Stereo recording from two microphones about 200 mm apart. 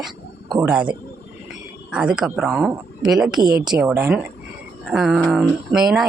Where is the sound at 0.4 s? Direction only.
20° right (ahead or behind).